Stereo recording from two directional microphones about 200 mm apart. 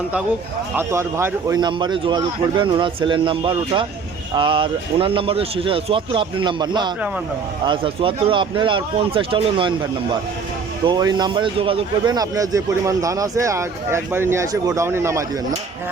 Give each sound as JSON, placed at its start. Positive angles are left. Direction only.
{"t": 0.8, "sound": "speech", "side_deg": -15}
{"t": 10.8, "sound": "speech", "side_deg": -20}